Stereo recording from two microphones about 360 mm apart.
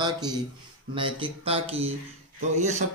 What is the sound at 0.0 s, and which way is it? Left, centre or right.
Speech, centre.